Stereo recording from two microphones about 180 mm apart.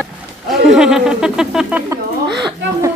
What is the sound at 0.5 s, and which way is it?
A woman's voice, centre (ahead or behind).